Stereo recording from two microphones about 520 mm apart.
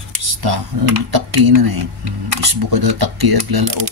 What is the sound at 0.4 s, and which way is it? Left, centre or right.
Speech, right.